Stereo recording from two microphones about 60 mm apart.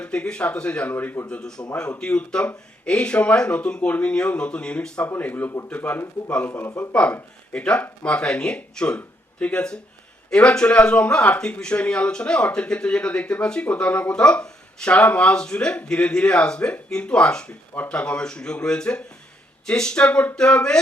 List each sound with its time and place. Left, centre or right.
0.0 s speech: centre
0.9 s a man's voice: left
1.3 s speech: centre
5.0 s a man's voice: left
6.7 s speech: centre